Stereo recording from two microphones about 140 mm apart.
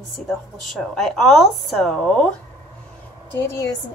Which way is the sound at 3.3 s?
20° left (ahead or behind).